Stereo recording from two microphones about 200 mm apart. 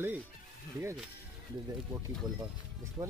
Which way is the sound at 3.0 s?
15° right (ahead or behind).